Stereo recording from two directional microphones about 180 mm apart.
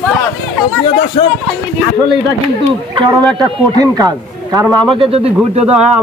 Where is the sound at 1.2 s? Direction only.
35° left (ahead or behind).